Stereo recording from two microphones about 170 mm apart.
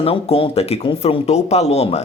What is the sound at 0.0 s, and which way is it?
Speech, 35° left (ahead or behind).